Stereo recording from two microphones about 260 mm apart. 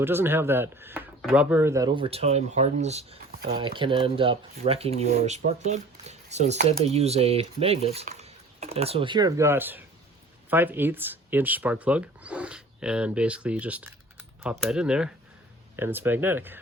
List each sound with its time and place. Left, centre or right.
0.0 s speech: centre